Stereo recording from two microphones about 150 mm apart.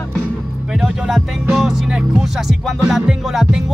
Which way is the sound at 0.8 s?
Centre (ahead or behind).